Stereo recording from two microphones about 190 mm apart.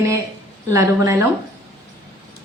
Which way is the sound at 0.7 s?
15° right (ahead or behind).